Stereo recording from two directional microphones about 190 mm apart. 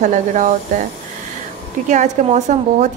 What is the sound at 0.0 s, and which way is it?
Speech, 40° right (ahead or behind).